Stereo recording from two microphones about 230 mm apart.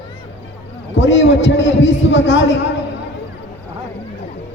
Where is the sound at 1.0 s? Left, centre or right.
Left.